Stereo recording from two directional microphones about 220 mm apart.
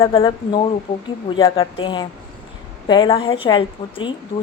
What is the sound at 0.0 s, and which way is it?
A woman's voice, 20° left (ahead or behind).